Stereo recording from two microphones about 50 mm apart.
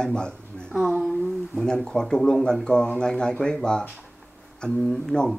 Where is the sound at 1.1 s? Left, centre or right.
Centre.